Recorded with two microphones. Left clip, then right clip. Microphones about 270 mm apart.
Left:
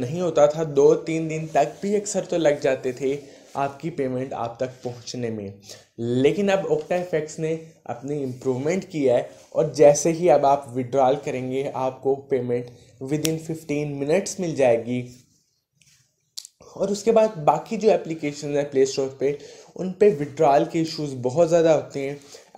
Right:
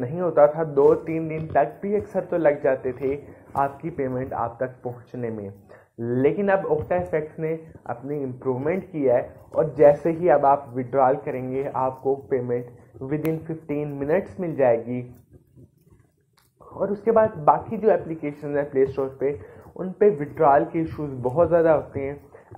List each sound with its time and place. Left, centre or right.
0.0 s speech: left
16.7 s speech: left
17.0 s speech: left